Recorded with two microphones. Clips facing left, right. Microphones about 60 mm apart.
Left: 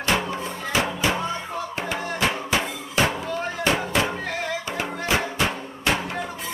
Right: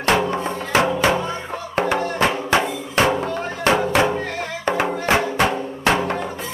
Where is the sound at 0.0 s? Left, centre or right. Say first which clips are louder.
Right 5 dB; right.